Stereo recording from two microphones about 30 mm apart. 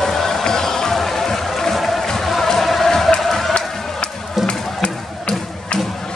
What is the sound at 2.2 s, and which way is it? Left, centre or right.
Music, centre.